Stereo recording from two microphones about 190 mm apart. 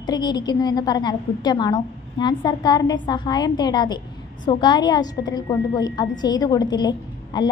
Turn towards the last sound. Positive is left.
turn(degrees=20)  # may be behind; listen again after turning